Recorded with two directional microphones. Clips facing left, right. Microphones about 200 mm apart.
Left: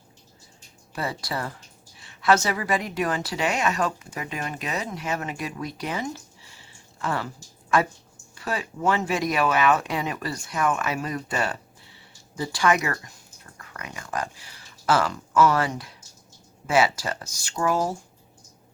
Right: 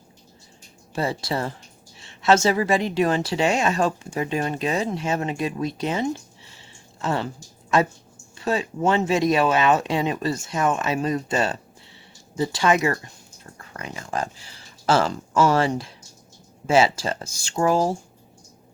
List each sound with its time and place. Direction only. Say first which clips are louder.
0.9 s a woman's voice: right 5 dB; 25° right (ahead or behind)